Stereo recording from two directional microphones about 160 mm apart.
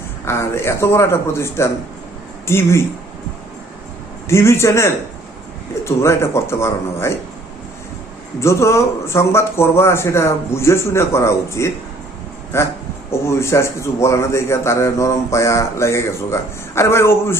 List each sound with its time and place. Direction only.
0.3 s a man's voice: 15° left (ahead or behind)
4.3 s a man's voice: 15° left (ahead or behind)
8.4 s a man's voice: 15° left (ahead or behind)